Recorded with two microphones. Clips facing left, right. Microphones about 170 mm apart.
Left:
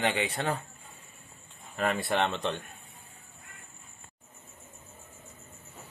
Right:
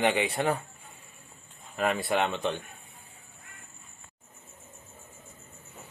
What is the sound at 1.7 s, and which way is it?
Speech, centre (ahead or behind).